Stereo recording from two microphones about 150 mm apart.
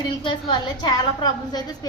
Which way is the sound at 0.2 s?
35° left (ahead or behind).